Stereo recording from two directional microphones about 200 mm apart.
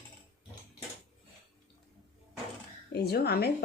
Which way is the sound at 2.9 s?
55° left (ahead or behind).